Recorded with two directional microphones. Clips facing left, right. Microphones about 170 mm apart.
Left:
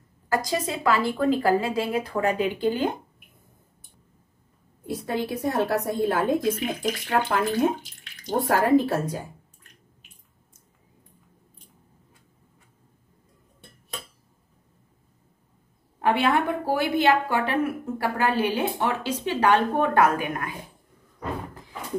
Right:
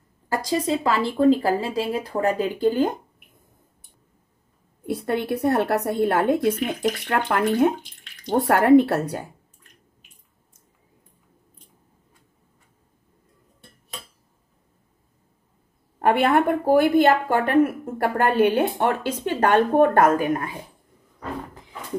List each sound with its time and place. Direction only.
0.4 s a woman's voice: 30° right (ahead or behind)
4.8 s a woman's voice: 60° right (ahead or behind)
16.0 s a woman's voice: 50° right (ahead or behind); by 20.5 s 35° right (ahead or behind)